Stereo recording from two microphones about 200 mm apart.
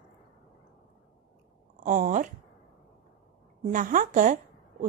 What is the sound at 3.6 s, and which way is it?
Speech, 40° right (ahead or behind).